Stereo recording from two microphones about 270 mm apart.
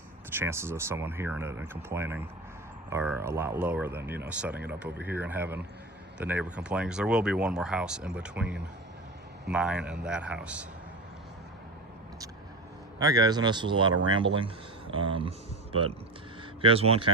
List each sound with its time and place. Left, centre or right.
0.3 s speech: centre
13.0 s speech: centre